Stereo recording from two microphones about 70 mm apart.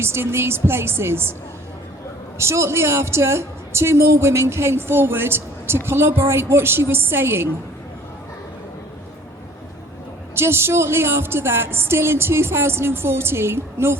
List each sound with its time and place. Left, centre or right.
0.0 s a woman's voice: right
2.4 s a woman's voice: right
10.3 s a woman's voice: right